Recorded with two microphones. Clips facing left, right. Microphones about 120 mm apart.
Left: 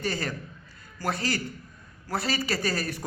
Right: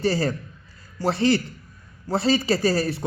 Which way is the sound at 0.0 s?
30° right (ahead or behind).